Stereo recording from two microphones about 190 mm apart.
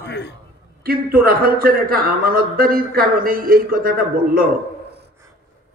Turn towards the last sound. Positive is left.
turn(degrees=-50)  # may be behind; listen again after turning